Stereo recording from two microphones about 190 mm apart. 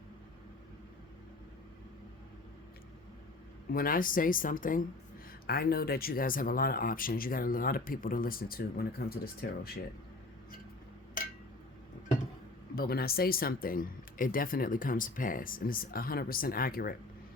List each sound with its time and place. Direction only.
3.7 s speech: 50° left (ahead or behind)
12.7 s speech: 55° left (ahead or behind)